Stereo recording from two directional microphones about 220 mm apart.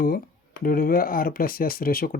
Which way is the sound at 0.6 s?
40° left (ahead or behind).